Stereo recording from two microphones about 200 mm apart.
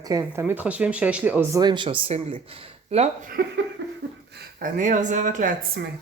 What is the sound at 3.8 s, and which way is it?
Laughter, 60° right (ahead or behind).